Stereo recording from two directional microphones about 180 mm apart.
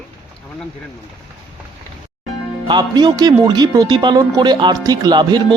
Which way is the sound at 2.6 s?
20° right (ahead or behind).